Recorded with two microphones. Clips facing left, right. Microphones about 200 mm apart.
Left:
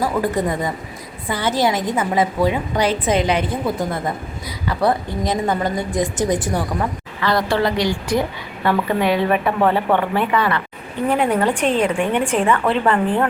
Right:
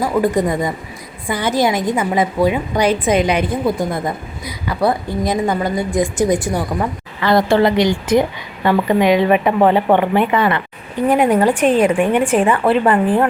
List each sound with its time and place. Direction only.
0.0 s a woman's voice: 15° right (ahead or behind)
7.2 s a woman's voice: 25° right (ahead or behind)